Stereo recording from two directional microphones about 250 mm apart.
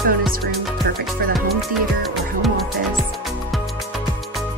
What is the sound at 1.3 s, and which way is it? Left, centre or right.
Music, centre.